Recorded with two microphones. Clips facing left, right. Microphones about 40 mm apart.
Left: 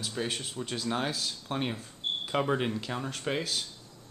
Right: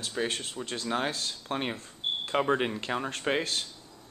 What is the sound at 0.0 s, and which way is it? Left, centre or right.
Speech, centre.